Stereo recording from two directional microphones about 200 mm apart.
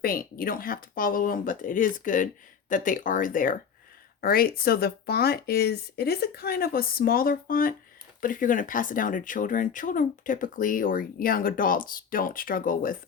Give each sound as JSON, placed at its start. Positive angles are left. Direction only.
{"t": 0.0, "sound": "speech", "side_deg": 45}